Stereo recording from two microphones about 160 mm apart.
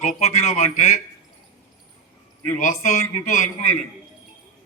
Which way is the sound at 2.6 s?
50° left (ahead or behind).